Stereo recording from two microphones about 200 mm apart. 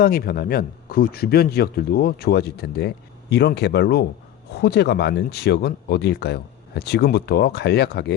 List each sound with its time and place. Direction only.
0.0 s a man's voice: 50° left (ahead or behind)